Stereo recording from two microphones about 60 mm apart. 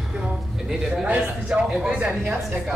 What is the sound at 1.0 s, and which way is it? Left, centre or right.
A man's voice, right.